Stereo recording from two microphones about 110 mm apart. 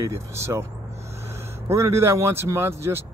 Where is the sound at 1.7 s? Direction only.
25° right (ahead or behind).